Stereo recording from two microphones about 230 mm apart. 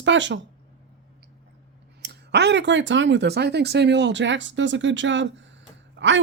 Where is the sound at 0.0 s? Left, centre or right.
Right.